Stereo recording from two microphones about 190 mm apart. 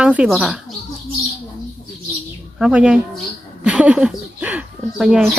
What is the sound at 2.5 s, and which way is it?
Speech, 5° right (ahead or behind).